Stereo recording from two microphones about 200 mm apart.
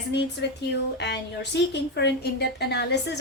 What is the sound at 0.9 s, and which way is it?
A woman's voice, 55° left (ahead or behind).